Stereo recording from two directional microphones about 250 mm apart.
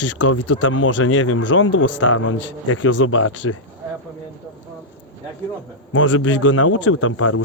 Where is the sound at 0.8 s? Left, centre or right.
Left.